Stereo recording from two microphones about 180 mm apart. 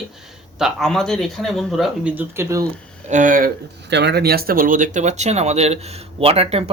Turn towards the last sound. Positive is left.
turn(degrees=-35)  # may be behind; listen again after turning